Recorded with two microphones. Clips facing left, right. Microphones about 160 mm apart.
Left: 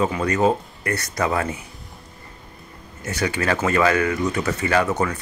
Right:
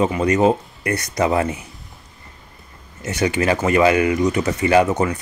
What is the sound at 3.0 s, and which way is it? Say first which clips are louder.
Speech: right 4 dB; 20° right (ahead or behind).